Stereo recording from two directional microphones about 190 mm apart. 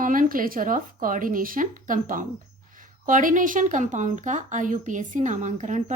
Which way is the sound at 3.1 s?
45° right (ahead or behind).